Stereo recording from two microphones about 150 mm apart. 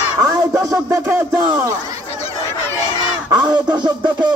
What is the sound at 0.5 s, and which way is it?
Music, 20° right (ahead or behind).